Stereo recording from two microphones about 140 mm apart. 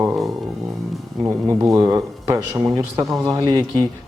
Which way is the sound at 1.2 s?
20° right (ahead or behind).